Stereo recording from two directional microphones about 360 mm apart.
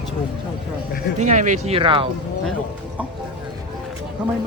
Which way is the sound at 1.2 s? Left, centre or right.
Centre.